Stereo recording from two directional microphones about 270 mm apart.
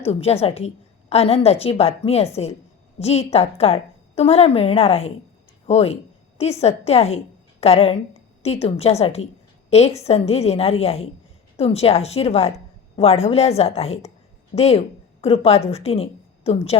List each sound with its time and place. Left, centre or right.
0.1 s a woman's voice: left